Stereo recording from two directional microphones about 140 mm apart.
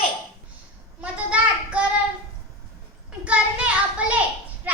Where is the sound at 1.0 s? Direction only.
10° right (ahead or behind).